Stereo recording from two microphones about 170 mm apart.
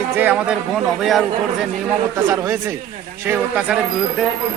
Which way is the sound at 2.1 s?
20° right (ahead or behind).